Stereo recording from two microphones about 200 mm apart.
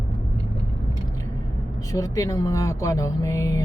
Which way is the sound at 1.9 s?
15° left (ahead or behind).